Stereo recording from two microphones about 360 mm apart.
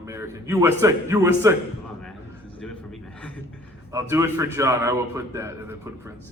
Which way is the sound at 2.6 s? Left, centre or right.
Centre.